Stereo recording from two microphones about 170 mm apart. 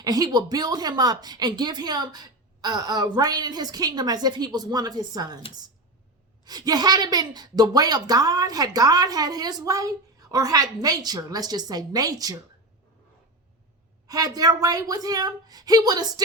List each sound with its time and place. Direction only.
0.0 s a woman's voice: 20° right (ahead or behind)
6.4 s a woman's voice: 25° right (ahead or behind)
14.1 s a woman's voice: 20° right (ahead or behind)